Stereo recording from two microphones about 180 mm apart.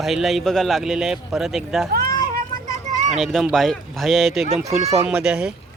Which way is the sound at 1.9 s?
60° right (ahead or behind).